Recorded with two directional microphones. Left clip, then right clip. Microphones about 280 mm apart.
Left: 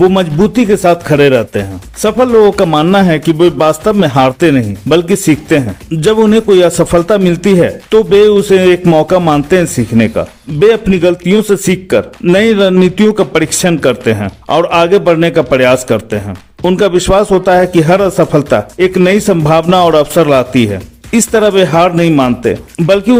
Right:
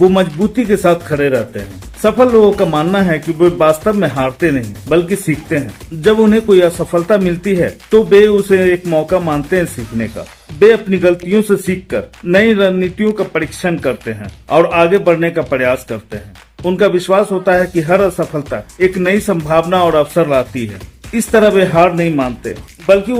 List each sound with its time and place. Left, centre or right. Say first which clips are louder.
0.0 s speech: left 2 dB; left